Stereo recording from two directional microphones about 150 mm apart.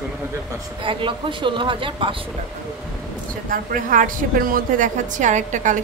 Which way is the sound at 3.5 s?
65° right (ahead or behind).